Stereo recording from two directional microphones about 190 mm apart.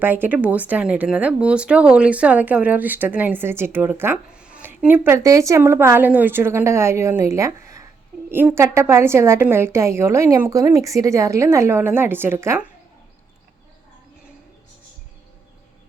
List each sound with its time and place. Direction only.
0.0 s speech: 10° right (ahead or behind)